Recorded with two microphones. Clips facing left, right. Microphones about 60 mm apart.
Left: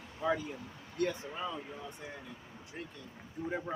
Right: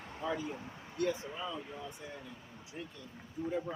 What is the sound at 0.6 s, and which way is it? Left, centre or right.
Speech, centre.